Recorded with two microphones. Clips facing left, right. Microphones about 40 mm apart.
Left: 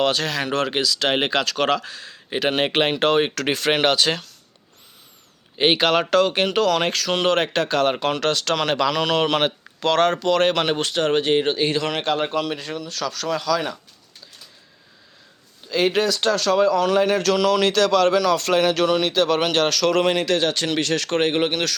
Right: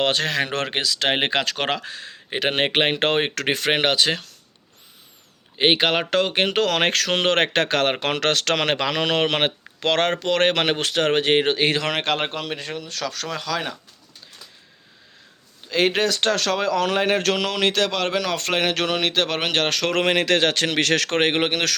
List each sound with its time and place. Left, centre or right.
0.0 s speech: right; by 4.2 s centre
5.5 s speech: centre
6.6 s speech: right
12.3 s speech: right
15.6 s speech: right
20.0 s a man's voice: right